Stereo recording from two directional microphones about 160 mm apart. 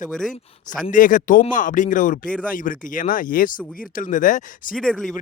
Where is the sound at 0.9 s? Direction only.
55° left (ahead or behind).